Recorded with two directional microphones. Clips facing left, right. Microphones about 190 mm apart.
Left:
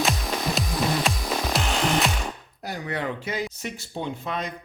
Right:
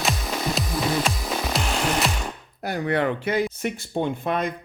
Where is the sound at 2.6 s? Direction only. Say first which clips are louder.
Right 6 dB; 60° right (ahead or behind).